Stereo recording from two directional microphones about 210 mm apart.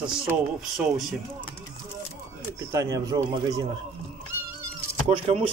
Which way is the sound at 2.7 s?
15° right (ahead or behind).